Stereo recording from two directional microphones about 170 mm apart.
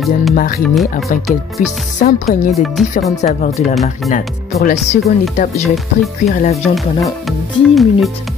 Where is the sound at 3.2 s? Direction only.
50° left (ahead or behind).